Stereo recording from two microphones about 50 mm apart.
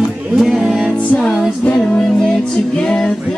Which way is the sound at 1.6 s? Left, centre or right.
Left.